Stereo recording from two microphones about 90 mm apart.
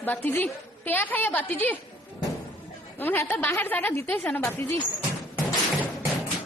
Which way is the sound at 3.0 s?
20° left (ahead or behind).